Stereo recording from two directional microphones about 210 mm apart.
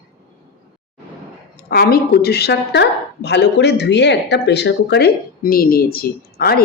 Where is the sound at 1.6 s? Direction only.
45° left (ahead or behind).